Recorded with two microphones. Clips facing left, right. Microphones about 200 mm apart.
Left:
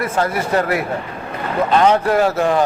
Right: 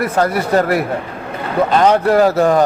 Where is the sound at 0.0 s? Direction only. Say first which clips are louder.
Right 3 dB; 40° right (ahead or behind).